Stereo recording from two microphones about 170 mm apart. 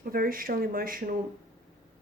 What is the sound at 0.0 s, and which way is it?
A woman's voice, 55° right (ahead or behind).